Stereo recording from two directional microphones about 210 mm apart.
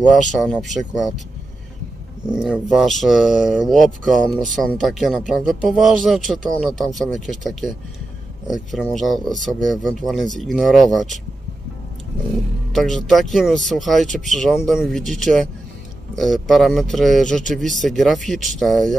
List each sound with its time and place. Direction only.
0.4 s speech: centre (ahead or behind)
2.2 s speech: 5° right (ahead or behind)
8.8 s speech: centre (ahead or behind)
12.7 s speech: centre (ahead or behind)